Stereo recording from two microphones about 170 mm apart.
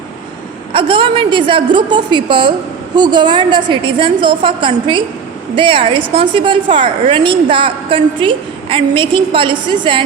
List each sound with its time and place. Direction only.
0.7 s a woman's voice: 30° right (ahead or behind)